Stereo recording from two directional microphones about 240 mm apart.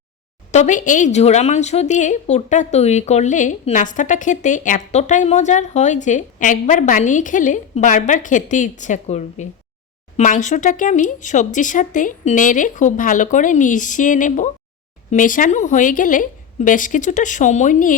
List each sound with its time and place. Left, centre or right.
0.5 s a woman's voice: left